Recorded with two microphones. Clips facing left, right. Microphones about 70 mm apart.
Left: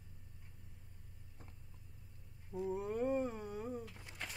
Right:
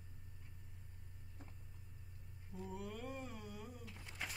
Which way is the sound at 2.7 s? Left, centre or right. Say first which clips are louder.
Left 12 dB; left.